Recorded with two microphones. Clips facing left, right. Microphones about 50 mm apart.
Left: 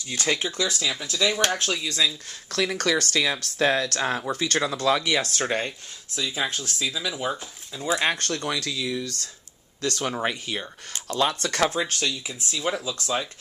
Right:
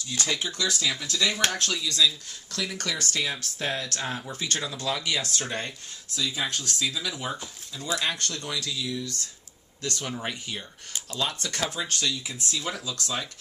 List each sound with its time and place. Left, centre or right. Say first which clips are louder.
0.1 s speech: left 4 dB; left
0.5 s speech: left 1 dB; left
1.8 s speech: right 1 dB; left
2.5 s speech: left 8 dB; left
5.0 s speech: left 5 dB; left
6.1 s speech: left 2 dB; left
8.0 s speech: left 5 dB; left
8.5 s speech: left 3 dB; left
11.1 s speech: left 7 dB; left
11.3 s speech: left 7 dB; left